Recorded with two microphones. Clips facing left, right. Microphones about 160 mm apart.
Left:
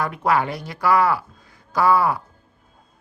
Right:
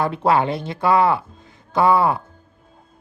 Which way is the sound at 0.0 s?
30° right (ahead or behind).